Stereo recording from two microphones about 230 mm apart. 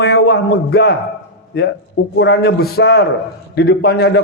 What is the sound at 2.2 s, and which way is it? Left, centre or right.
A man's voice, left.